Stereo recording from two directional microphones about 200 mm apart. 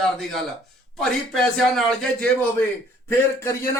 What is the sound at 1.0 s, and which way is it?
Speech, centre (ahead or behind).